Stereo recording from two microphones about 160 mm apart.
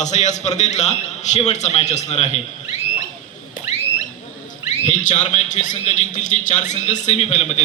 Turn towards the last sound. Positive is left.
turn(degrees=45)  # may be behind; listen again after turning